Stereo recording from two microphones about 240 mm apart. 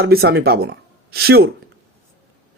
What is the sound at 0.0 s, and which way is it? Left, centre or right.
Speech, right.